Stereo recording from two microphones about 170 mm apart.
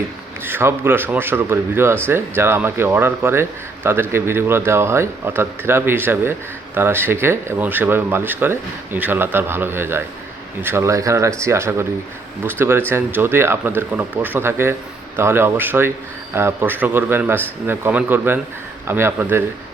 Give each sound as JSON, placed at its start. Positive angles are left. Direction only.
{"t": 0.4, "sound": "speech", "side_deg": -15}